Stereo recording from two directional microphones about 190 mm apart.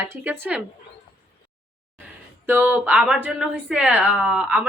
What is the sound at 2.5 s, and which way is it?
A woman's voice, 10° right (ahead or behind).